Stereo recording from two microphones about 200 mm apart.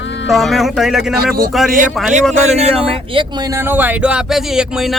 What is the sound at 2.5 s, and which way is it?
Speech, 30° right (ahead or behind).